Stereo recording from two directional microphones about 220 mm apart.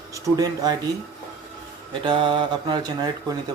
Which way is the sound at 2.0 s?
20° right (ahead or behind).